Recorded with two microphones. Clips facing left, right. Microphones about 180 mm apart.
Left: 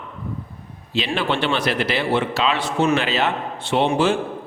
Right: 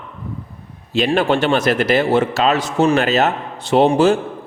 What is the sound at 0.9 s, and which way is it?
A man's voice, 45° right (ahead or behind).